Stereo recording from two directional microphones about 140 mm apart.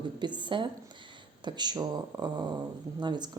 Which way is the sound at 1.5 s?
30° right (ahead or behind).